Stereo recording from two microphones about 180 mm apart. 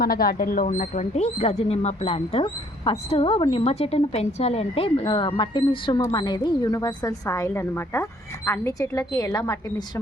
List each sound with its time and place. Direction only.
0.0 s a woman's voice: 55° left (ahead or behind); by 10.0 s 20° left (ahead or behind)